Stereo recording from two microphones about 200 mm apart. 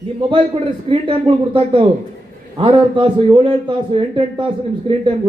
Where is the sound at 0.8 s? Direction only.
25° right (ahead or behind).